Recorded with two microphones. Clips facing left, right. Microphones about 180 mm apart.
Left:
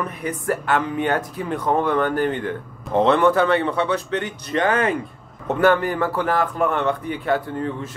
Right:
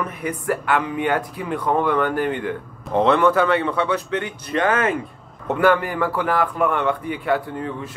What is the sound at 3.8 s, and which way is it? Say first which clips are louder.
Speech: even; 40° left (ahead or behind).